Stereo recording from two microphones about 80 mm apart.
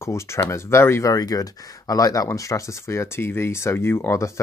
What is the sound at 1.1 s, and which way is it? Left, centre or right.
Speech, left.